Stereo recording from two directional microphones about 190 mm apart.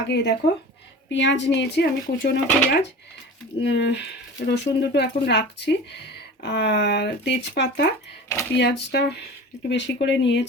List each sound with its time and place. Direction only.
0.1 s speech: 65° left (ahead or behind)